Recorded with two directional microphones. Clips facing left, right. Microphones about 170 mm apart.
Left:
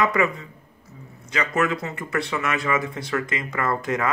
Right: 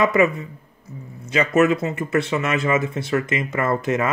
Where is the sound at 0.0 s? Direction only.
20° right (ahead or behind).